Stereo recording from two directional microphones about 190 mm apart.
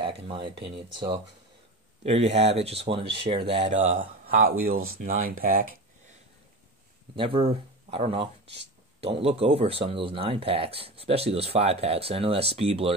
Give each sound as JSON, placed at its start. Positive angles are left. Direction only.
{"t": 0.0, "sound": "a sound", "side_deg": -25}
{"t": 0.7, "sound": "speech", "side_deg": -25}
{"t": 4.6, "sound": "speech", "side_deg": -50}
{"t": 7.2, "sound": "speech", "side_deg": -30}